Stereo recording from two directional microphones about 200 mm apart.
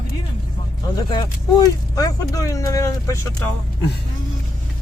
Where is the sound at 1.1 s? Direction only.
20° left (ahead or behind).